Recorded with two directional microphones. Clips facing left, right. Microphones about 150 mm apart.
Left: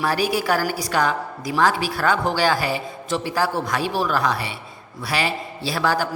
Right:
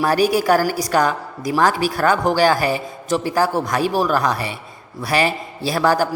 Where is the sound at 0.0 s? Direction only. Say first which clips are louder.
Right 5 dB; 45° right (ahead or behind).